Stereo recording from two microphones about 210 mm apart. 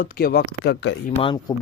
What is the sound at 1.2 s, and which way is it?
Speech, 25° left (ahead or behind).